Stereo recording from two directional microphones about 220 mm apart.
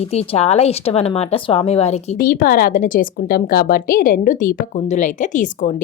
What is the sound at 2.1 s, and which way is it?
A woman's voice, 40° left (ahead or behind).